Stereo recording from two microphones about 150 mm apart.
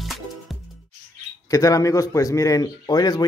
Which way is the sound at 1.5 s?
20° left (ahead or behind).